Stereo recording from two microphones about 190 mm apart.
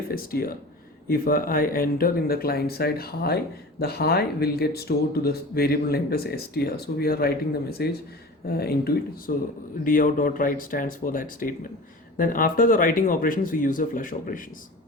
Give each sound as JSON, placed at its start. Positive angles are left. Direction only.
{"t": 0.1, "sound": "speech", "side_deg": 50}